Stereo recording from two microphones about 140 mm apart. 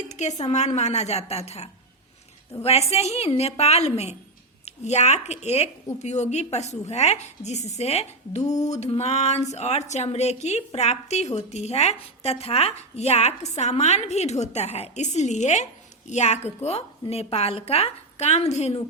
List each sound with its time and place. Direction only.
0.1 s a woman's voice: 55° left (ahead or behind)